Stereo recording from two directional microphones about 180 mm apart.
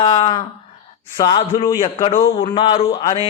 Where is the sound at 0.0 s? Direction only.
30° left (ahead or behind).